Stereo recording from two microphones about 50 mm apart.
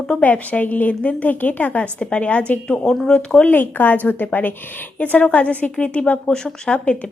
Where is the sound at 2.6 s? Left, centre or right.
Centre.